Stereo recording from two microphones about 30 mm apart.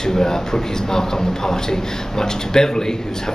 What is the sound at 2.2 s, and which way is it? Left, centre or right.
Speech, left.